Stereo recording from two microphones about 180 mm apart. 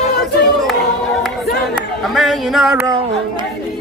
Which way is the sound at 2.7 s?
20° right (ahead or behind).